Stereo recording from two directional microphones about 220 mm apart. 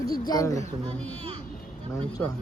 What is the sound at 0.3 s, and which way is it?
Speech, 15° left (ahead or behind).